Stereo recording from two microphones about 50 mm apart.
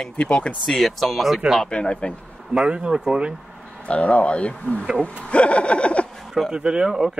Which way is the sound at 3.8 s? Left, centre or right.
Left.